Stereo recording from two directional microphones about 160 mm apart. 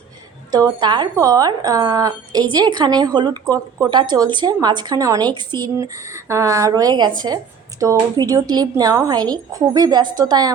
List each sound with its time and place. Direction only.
0.5 s speech: 25° right (ahead or behind)